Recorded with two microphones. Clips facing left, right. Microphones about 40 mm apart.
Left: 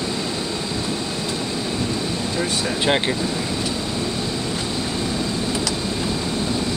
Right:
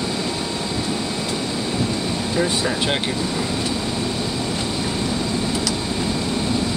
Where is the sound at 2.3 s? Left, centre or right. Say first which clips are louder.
Right 4 dB; centre.